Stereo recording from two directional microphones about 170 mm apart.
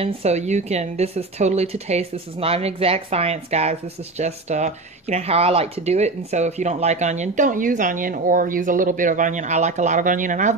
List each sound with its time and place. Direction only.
0.0 s speech: 40° right (ahead or behind)